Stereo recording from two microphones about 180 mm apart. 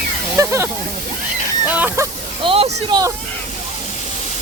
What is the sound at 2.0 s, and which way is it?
Speech, 15° right (ahead or behind).